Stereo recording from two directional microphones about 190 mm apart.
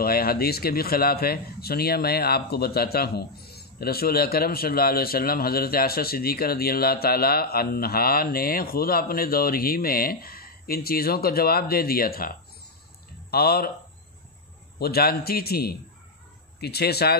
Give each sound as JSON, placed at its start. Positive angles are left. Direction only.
{"t": 0.0, "sound": "speech", "side_deg": 55}
{"t": 14.8, "sound": "speech", "side_deg": 55}